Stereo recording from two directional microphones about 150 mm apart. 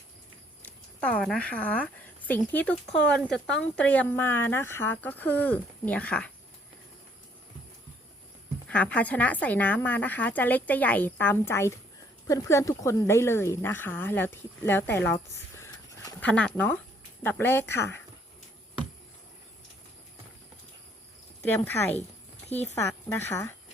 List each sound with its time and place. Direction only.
1.0 s speech: 5° left (ahead or behind)
8.6 s speech: 10° left (ahead or behind)
21.5 s speech: 15° left (ahead or behind)
22.4 s speech: 45° left (ahead or behind)
22.7 s speech: 20° left (ahead or behind)